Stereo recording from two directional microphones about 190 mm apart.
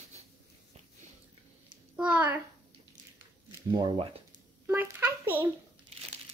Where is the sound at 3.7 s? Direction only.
20° right (ahead or behind).